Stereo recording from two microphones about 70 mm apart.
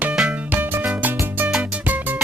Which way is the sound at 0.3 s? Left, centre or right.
Right.